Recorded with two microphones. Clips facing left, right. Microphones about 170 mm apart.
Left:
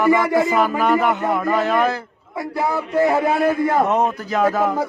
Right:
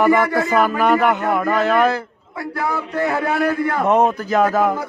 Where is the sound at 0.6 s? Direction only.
65° right (ahead or behind).